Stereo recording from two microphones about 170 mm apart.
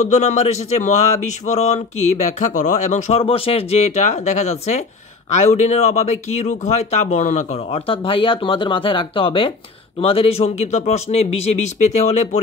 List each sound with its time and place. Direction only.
0.1 s a man's voice: 45° left (ahead or behind)